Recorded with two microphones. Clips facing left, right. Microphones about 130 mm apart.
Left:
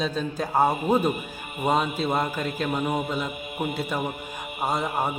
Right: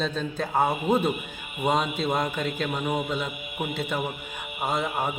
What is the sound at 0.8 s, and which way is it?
Speech, 40° left (ahead or behind).